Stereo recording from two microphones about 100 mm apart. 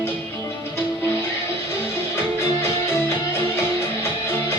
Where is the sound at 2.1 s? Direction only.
25° left (ahead or behind).